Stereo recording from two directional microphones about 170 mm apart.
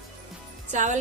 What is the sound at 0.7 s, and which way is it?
Speech, 45° right (ahead or behind).